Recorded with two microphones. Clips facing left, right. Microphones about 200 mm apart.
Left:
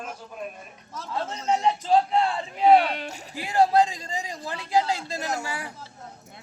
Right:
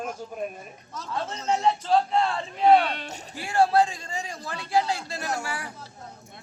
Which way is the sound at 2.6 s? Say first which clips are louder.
Left 1 dB; 10° left (ahead or behind).